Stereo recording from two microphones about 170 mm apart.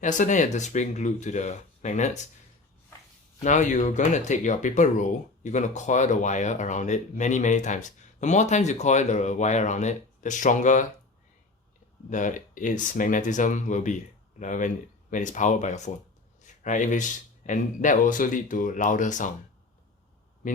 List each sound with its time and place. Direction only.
0.0 s speech: 45° left (ahead or behind)
3.4 s speech: 45° left (ahead or behind)
12.1 s speech: 50° left (ahead or behind)
20.4 s a man's voice: 50° left (ahead or behind)